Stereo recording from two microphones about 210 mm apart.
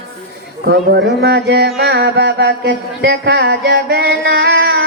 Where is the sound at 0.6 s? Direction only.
50° right (ahead or behind).